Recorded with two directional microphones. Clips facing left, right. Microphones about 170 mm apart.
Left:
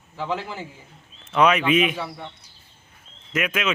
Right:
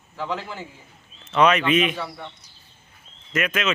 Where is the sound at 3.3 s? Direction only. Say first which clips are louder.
Right 1 dB; 10° left (ahead or behind).